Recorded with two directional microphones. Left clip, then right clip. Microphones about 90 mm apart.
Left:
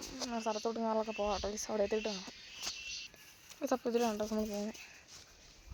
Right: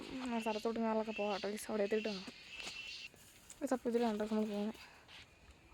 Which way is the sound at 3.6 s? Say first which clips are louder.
Left 3 dB; 15° right (ahead or behind).